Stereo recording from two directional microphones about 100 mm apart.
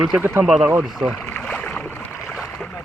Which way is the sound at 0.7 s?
20° right (ahead or behind).